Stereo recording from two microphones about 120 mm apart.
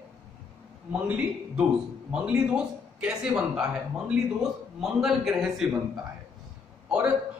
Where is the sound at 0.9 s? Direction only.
10° right (ahead or behind).